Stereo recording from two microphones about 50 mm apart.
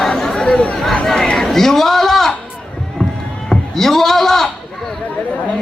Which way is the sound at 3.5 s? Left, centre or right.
Centre.